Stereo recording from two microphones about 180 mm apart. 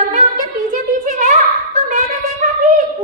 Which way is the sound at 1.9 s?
40° right (ahead or behind).